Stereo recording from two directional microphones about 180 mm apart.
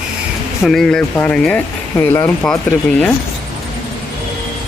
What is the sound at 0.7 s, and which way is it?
Speech, centre (ahead or behind).